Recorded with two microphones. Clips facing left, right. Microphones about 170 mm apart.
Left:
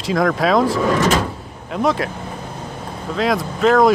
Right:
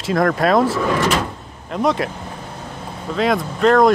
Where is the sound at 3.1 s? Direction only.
Centre (ahead or behind).